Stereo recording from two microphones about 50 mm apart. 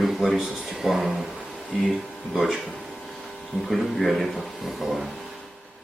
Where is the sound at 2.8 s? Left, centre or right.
Centre.